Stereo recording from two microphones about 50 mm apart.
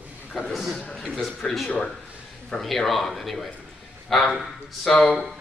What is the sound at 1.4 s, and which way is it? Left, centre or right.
Speech, centre.